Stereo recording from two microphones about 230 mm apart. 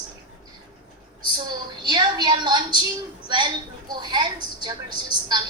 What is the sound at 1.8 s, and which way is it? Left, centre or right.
Speech, centre.